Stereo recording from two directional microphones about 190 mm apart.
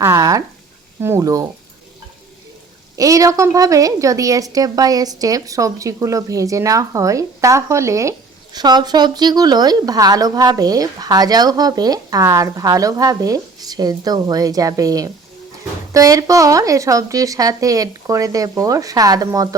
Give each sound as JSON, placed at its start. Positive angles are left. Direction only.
{"t": 0.0, "sound": "a sound", "side_deg": -15}
{"t": 1.0, "sound": "a woman's voice", "side_deg": -15}
{"t": 2.9, "sound": "a woman's voice", "side_deg": -15}